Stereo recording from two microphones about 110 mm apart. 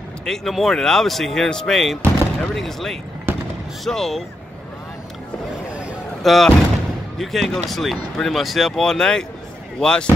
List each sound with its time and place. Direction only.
0.2 s speech: 5° left (ahead or behind)
3.3 s fireworks: 20° right (ahead or behind)
3.8 s speech: 5° left (ahead or behind)
6.2 s speech: centre (ahead or behind)